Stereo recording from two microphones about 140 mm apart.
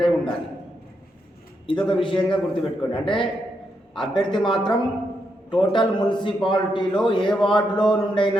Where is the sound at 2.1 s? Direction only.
35° left (ahead or behind).